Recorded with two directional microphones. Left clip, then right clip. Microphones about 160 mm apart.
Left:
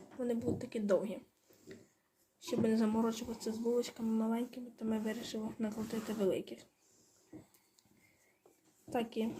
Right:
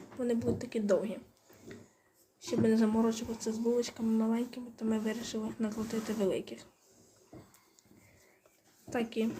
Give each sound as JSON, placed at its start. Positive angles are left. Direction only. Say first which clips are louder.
{"t": 0.2, "sound": "a woman's voice", "louder": "right 4 dB", "side_deg": 5}
{"t": 2.4, "sound": "speech", "louder": "right 4 dB", "side_deg": 10}
{"t": 8.9, "sound": "a woman's voice", "louder": "right 3 dB", "side_deg": 5}